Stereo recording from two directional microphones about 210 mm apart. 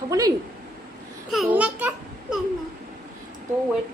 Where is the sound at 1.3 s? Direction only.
5° right (ahead or behind).